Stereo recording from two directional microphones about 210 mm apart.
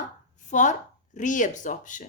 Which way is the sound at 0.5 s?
35° left (ahead or behind).